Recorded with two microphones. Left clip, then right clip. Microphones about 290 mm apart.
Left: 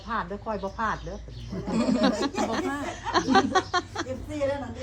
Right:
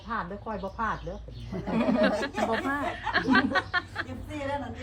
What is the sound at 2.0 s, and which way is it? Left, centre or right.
Speech, left.